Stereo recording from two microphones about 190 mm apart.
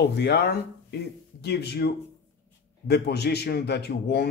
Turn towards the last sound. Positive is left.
turn(degrees=60)  # may be behind; listen again after turning